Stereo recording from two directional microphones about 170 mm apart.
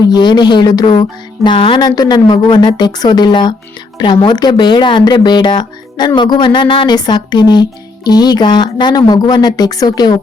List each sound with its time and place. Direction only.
0.1 s a woman's voice: 25° left (ahead or behind)